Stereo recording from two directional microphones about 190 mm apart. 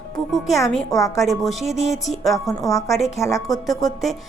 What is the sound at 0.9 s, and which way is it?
Speech, 15° left (ahead or behind).